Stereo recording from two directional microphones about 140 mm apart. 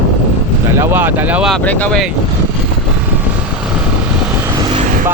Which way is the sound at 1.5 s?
10° left (ahead or behind).